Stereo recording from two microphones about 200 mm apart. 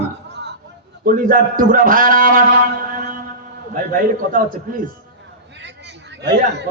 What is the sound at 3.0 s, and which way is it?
Music, 45° right (ahead or behind).